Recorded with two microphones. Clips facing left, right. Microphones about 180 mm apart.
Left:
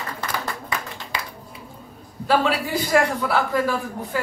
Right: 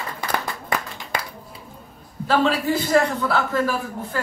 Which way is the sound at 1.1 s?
50° right (ahead or behind).